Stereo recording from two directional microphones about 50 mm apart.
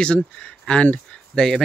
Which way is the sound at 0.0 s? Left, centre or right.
Centre.